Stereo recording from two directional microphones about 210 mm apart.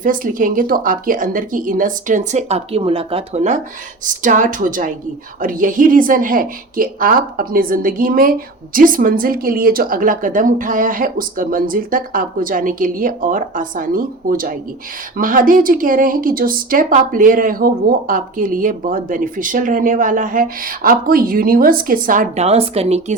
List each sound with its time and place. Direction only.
0.0 s a woman's voice: 40° right (ahead or behind)